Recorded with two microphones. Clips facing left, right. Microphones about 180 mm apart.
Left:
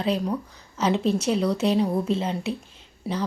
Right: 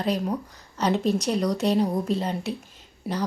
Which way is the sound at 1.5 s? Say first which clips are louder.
Left 1 dB; 35° right (ahead or behind).